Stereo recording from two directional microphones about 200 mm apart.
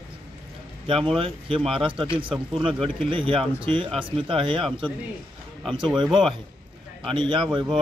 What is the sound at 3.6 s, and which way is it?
A man's voice, 25° right (ahead or behind).